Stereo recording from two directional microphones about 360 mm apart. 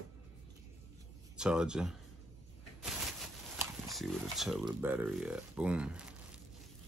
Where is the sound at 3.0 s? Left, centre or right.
Centre.